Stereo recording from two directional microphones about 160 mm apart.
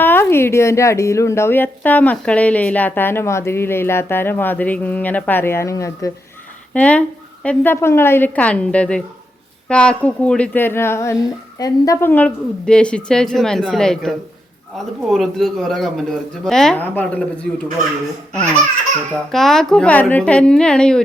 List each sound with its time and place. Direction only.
0.0 s speech: 15° left (ahead or behind)
6.7 s a man's voice: 10° left (ahead or behind)
19.3 s a man's voice: centre (ahead or behind)